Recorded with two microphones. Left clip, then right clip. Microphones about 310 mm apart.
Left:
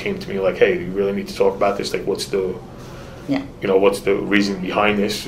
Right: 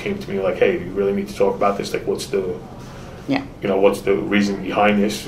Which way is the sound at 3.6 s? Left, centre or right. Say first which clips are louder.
Left 1 dB; left.